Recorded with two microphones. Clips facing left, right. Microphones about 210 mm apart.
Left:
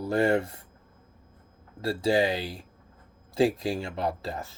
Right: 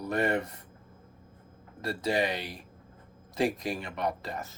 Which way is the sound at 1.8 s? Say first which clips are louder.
Left 5 dB; 25° left (ahead or behind).